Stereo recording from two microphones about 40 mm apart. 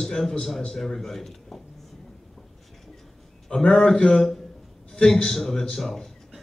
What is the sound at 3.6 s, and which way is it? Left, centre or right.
Speech, left.